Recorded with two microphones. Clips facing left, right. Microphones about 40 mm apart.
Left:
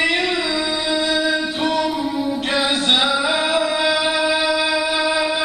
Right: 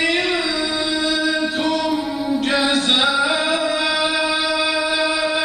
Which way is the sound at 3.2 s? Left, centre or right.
Left.